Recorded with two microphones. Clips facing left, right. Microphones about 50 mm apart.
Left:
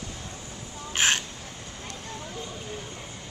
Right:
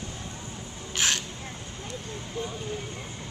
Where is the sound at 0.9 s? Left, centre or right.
Left.